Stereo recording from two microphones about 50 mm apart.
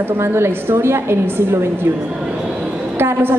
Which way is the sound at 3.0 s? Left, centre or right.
Right.